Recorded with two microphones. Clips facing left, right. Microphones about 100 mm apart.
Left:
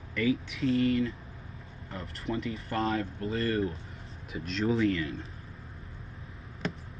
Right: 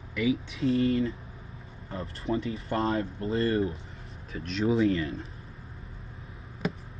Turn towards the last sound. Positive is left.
turn(degrees=-5)  # may be behind; listen again after turning